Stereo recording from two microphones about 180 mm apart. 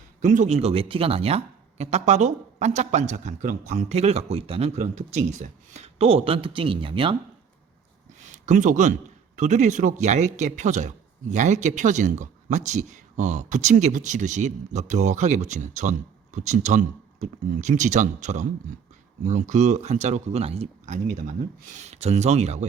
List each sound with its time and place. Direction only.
0.2 s a man's voice: 45° right (ahead or behind)
8.2 s a man's voice: 40° right (ahead or behind)